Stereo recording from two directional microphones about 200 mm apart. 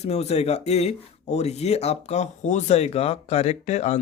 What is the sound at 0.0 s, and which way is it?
Speech, 30° left (ahead or behind).